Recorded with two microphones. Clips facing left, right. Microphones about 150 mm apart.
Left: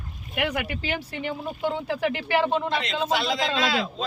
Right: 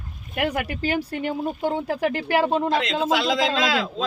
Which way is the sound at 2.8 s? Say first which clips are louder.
Right 3 dB; 90° right.